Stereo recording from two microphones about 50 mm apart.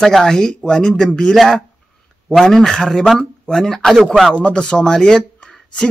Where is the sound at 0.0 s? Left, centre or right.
Centre.